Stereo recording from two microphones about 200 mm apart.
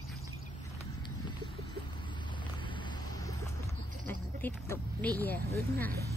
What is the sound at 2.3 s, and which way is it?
Vehicle, 25° left (ahead or behind).